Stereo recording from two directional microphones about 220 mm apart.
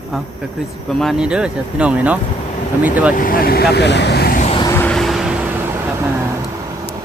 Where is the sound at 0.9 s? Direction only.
Centre (ahead or behind).